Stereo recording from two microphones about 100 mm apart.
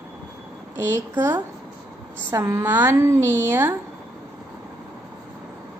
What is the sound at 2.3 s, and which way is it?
A woman's voice, 30° right (ahead or behind).